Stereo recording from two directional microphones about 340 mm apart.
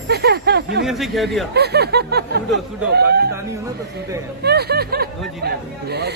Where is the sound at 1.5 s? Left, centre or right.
Right.